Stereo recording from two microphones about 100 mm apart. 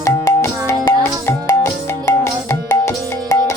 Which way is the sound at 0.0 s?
30° left (ahead or behind).